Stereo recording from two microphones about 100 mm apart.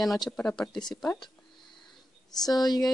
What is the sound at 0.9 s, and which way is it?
Speech, 35° left (ahead or behind).